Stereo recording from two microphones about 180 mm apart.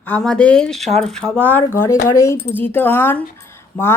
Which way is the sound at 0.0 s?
5° left (ahead or behind).